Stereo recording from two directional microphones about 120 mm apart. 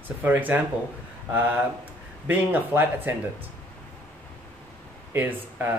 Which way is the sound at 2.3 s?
15° right (ahead or behind).